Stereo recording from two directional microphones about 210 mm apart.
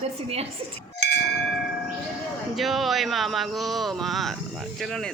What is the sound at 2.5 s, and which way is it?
Speech, centre (ahead or behind).